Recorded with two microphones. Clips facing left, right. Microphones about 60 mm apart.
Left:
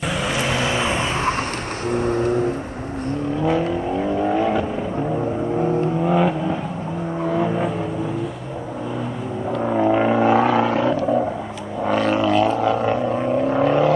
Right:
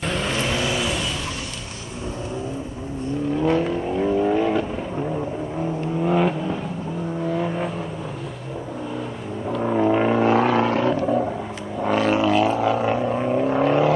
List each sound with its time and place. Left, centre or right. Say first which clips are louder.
0.0 s vehicle: left 2 dB; centre; by 1.3 s left
2.0 s vehicle: left 8 dB; left
3.4 s vehicle: left 2 dB; centre
6.0 s vehicle: right 1 dB; centre
9.5 s a sound: left 1 dB; centre
11.8 s vehicle: left 1 dB; centre